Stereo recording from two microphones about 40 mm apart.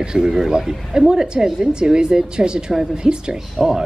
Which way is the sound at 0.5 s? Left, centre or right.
Centre.